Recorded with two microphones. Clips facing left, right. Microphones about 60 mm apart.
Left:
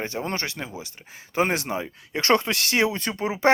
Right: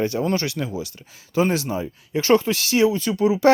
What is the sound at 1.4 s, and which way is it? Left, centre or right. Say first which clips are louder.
Speech: right 2 dB; left.